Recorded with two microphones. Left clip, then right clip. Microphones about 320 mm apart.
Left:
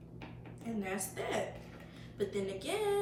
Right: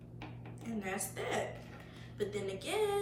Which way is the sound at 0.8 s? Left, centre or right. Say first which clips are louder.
Even; centre.